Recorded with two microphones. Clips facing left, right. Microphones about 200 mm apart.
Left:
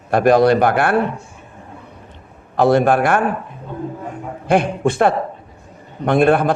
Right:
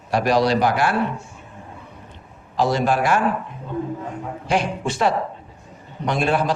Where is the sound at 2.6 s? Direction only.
55° left (ahead or behind).